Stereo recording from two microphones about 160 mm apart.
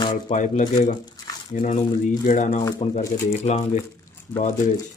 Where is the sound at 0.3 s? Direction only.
50° left (ahead or behind).